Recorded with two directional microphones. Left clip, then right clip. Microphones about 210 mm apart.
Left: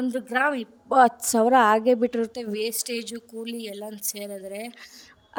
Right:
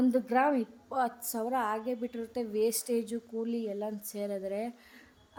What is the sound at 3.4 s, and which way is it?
Speech, centre (ahead or behind).